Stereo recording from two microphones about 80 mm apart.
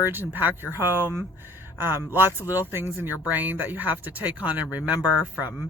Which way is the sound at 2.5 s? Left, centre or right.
Right.